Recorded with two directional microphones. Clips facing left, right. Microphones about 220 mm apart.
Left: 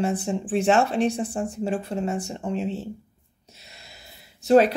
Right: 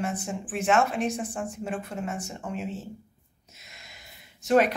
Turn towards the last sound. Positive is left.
turn(degrees=30)  # may be behind; listen again after turning